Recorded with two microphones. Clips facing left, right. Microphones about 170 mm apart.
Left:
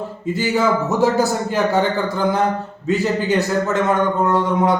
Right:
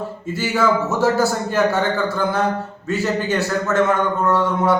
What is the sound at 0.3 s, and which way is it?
A man's voice, 15° left (ahead or behind).